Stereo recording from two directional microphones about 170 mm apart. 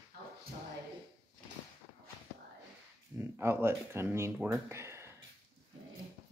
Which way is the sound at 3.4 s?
15° right (ahead or behind).